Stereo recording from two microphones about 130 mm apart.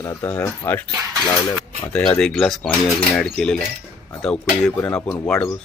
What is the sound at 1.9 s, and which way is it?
A man's voice, 5° left (ahead or behind).